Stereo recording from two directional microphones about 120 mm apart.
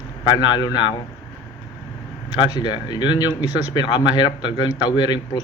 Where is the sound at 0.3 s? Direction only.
35° left (ahead or behind).